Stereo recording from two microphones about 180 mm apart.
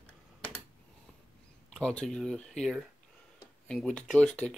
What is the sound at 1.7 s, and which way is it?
Speech, 5° left (ahead or behind).